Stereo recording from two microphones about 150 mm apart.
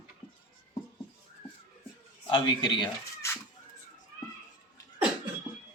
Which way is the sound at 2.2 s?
35° left (ahead or behind).